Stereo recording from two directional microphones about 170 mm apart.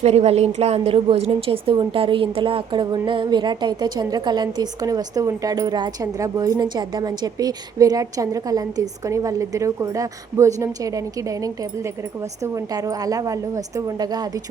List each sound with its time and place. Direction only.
0.0 s a woman's voice: 40° right (ahead or behind); by 14.3 s 25° right (ahead or behind)